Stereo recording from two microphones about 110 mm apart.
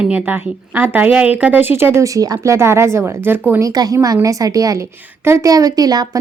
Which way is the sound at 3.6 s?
35° right (ahead or behind).